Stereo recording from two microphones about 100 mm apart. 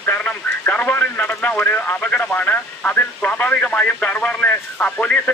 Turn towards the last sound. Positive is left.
turn(degrees=15)  # may be behind; listen again after turning